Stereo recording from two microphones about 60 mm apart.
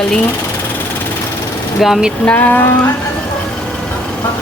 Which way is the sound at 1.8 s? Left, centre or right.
Centre.